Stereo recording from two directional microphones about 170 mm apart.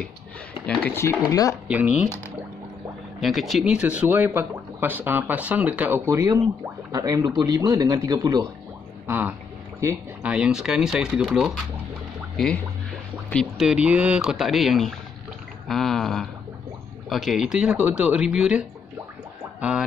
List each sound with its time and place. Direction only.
0.7 s speech: 10° left (ahead or behind)
1.7 s speech: 10° right (ahead or behind)
3.2 s speech: centre (ahead or behind); by 8.5 s 20° right (ahead or behind)
9.0 s speech: 10° right (ahead or behind)
13.3 s speech: centre (ahead or behind)